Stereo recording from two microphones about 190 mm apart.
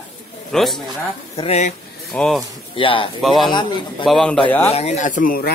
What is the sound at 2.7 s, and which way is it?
Speech, 25° left (ahead or behind).